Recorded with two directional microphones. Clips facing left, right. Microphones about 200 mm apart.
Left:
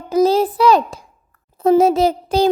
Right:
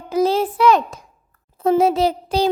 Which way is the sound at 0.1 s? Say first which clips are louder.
Left 4 dB; 40° left (ahead or behind).